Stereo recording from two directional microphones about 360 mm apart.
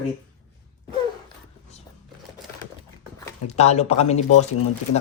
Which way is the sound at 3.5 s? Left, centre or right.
Centre.